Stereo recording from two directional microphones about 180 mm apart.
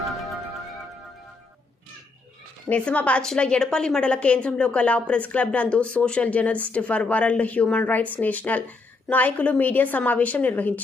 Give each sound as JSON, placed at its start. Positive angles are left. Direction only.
{"t": 2.6, "sound": "a woman's voice", "side_deg": 5}